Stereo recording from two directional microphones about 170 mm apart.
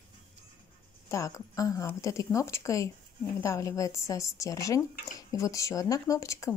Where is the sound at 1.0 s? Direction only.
20° left (ahead or behind).